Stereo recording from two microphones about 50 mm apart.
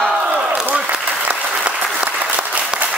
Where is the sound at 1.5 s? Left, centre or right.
Right.